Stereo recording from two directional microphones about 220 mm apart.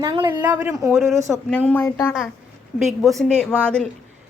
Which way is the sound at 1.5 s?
5° left (ahead or behind).